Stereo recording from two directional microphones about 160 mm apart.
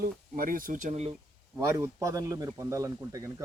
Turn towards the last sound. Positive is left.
turn(degrees=-20)  # may be behind; listen again after turning